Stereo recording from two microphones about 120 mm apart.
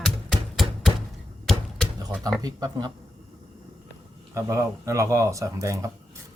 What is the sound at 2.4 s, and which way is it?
Speech, 35° right (ahead or behind).